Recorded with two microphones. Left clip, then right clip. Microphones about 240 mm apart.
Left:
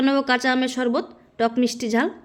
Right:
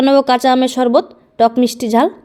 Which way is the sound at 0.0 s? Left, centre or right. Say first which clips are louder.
Right 9 dB; centre.